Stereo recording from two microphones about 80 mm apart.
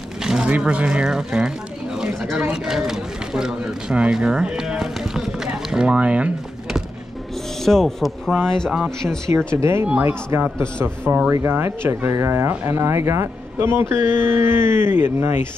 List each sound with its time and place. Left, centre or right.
0.2 s a sound: centre
0.5 s speech: centre
7.6 s speech: centre
9.6 s speech: right